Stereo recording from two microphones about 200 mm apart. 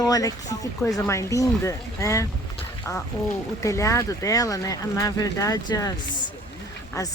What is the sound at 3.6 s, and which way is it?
Speech, 15° left (ahead or behind).